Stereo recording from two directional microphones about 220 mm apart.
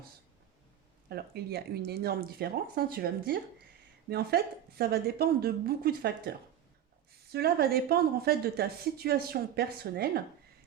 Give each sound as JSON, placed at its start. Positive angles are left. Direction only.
{"t": 1.1, "sound": "a woman's voice", "side_deg": -45}